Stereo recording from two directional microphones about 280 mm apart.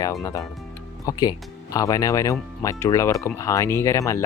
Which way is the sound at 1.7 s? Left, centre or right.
Centre.